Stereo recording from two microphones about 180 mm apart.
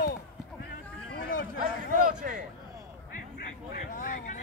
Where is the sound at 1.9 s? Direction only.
45° right (ahead or behind).